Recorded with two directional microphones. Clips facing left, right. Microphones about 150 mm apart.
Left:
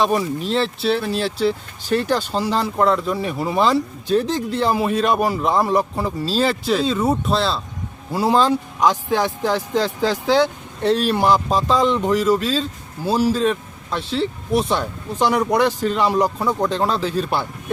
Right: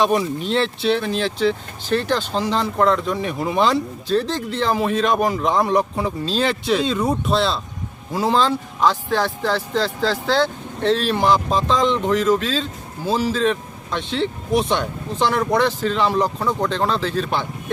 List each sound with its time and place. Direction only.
0.0 s speech: centre (ahead or behind)
4.1 s speech: 15° left (ahead or behind)